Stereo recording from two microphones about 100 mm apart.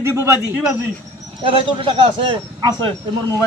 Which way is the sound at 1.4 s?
55° right (ahead or behind).